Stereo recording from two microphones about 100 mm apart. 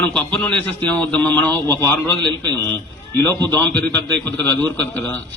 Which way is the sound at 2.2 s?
50° right (ahead or behind).